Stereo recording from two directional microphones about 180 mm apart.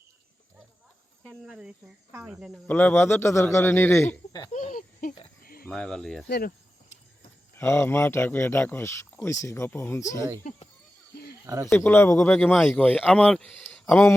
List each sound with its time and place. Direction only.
1.5 s speech: 5° right (ahead or behind)
2.6 s speech: 10° left (ahead or behind)
4.5 s speech: 45° left (ahead or behind)
5.4 s a sound: 55° left (ahead or behind)
5.6 s speech: 5° left (ahead or behind)
6.2 s speech: 65° left (ahead or behind)
7.6 s speech: 15° left (ahead or behind)
11.4 s speech: 20° right (ahead or behind)
11.7 s speech: 15° left (ahead or behind)